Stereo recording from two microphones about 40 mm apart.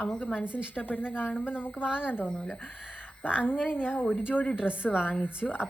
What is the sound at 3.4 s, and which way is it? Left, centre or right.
A woman's voice, left.